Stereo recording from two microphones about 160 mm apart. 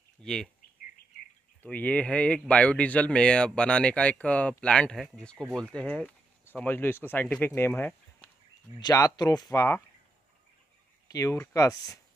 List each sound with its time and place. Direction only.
0.2 s speech: 5° left (ahead or behind)
1.6 s speech: 10° left (ahead or behind)
8.7 s speech: 20° left (ahead or behind)
11.1 s speech: 20° left (ahead or behind)